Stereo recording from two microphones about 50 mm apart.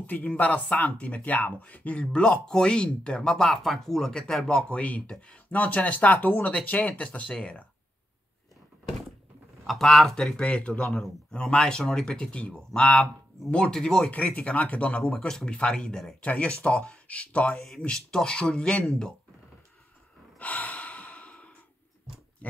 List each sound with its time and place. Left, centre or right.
0.0 s speech: left
9.7 s speech: centre
10.4 s speech: left
11.6 s speech: centre
12.3 s speech: left
14.1 s speech: left; by 16.2 s centre
16.2 s speech: left
17.6 s speech: centre
20.3 s breathing: left
22.4 s pig: left